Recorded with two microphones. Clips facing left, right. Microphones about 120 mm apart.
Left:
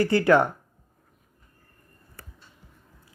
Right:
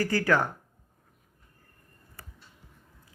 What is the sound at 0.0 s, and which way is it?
Speech, 20° left (ahead or behind).